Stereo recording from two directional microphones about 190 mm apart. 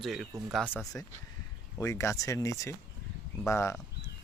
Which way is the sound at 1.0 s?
10° left (ahead or behind).